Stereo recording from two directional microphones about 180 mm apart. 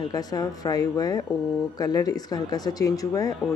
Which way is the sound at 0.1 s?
20° left (ahead or behind).